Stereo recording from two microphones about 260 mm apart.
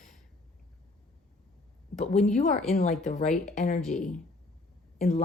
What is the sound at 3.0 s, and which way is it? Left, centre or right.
Speech, left.